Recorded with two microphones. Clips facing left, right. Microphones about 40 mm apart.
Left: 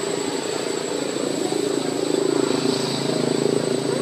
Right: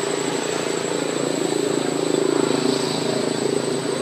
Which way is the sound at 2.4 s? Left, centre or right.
Centre.